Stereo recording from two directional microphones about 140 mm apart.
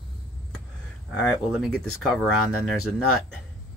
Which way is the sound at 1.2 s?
5° left (ahead or behind).